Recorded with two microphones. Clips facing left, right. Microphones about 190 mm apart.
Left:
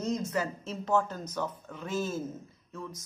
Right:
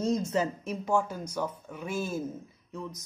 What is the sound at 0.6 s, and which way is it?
Speech, 10° right (ahead or behind).